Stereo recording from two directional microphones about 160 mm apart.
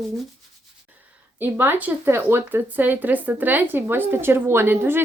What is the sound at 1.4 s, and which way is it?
A woman's voice, 15° right (ahead or behind).